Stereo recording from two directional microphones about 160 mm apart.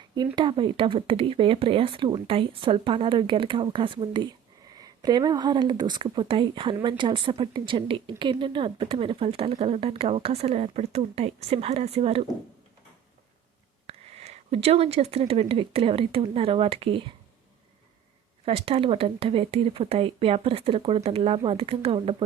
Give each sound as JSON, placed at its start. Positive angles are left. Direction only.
{"t": 0.3, "sound": "speech", "side_deg": -30}
{"t": 13.8, "sound": "speech", "side_deg": -40}
{"t": 18.4, "sound": "speech", "side_deg": -35}